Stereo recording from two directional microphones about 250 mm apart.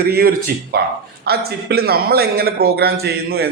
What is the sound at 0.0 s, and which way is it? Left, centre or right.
A man's voice, right.